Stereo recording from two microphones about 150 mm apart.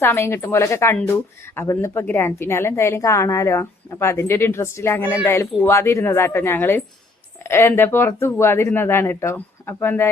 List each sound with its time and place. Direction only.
0.0 s a woman's voice: 15° left (ahead or behind)